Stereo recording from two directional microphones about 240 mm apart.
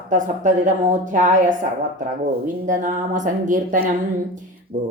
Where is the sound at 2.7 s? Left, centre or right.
Right.